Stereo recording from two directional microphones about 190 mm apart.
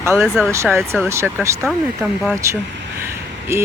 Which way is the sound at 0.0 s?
15° right (ahead or behind).